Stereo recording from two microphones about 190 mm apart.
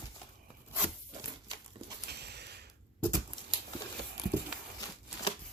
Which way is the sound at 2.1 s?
60° right (ahead or behind).